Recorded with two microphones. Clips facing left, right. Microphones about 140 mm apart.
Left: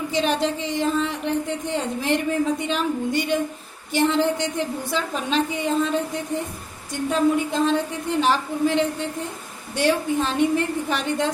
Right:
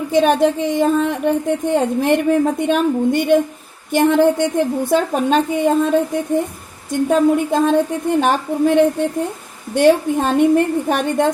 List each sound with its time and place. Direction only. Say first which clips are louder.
0.1 s a woman's voice: right 10 dB; 50° right (ahead or behind)